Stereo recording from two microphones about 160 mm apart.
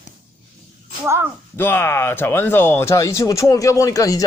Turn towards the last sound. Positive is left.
turn(degrees=20)  # may be behind; listen again after turning